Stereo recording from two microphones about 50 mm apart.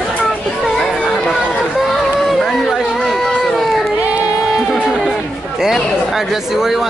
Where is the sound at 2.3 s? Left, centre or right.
Centre.